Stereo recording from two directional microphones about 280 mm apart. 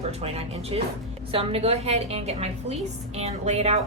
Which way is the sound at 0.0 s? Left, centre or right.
Right.